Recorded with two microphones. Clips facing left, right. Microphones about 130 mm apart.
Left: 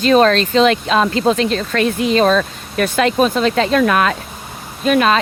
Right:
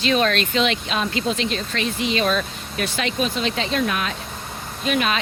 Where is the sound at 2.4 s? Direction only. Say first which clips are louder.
Left 8 dB; 50° left (ahead or behind).